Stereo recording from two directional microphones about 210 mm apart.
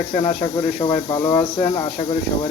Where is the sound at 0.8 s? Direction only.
15° left (ahead or behind).